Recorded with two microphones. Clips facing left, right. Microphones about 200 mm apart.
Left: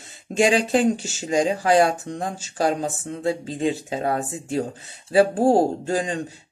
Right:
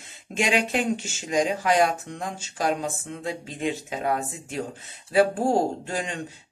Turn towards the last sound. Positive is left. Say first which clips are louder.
# left 5 dB
turn(degrees=35)  # may be behind; listen again after turning